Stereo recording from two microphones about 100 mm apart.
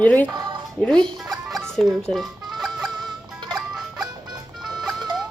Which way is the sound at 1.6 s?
5° left (ahead or behind).